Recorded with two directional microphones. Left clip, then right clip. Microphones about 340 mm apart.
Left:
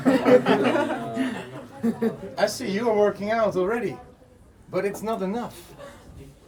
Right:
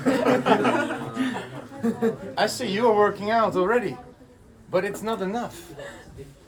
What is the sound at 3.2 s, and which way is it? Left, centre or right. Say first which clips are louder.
Speech: right 2 dB; centre.